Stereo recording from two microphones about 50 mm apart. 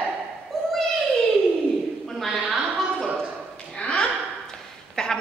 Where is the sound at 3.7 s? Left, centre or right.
Left.